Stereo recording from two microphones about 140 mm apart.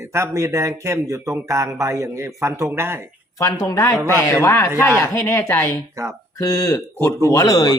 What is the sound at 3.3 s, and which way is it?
Speech, 25° left (ahead or behind).